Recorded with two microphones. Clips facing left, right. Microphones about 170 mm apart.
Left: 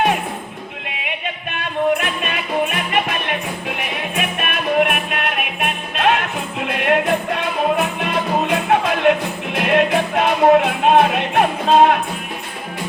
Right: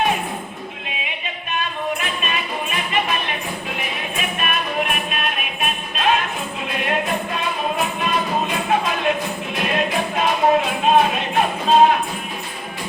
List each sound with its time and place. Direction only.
1.0 s music: 60° left (ahead or behind)